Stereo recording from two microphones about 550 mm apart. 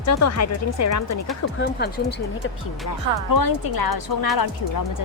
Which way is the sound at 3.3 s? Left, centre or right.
Left.